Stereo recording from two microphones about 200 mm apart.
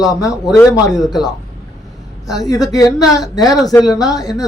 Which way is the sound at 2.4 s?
20° left (ahead or behind).